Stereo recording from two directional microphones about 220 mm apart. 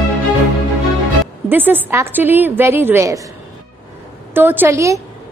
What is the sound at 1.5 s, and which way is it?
A woman's voice, 10° right (ahead or behind).